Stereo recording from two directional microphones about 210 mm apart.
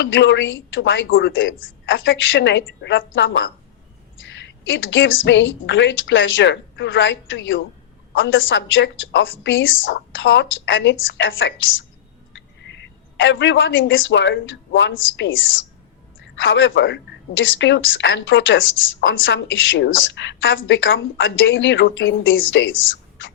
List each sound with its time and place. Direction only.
0.0 s a woman's voice: 60° left (ahead or behind)